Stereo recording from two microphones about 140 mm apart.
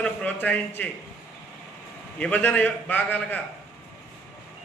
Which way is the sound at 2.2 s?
10° left (ahead or behind).